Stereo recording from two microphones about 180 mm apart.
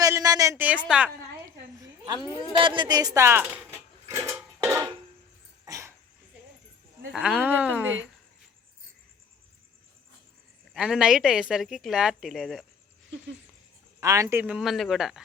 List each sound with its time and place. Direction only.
0.0 s a sound: 20° right (ahead or behind)
0.9 s speech: 5° right (ahead or behind)
1.8 s a sound: 25° right (ahead or behind)
5.6 s dog: 15° right (ahead or behind)
7.1 s speech: 5° right (ahead or behind)
10.8 s speech: 5° right (ahead or behind)
14.0 s speech: 15° right (ahead or behind)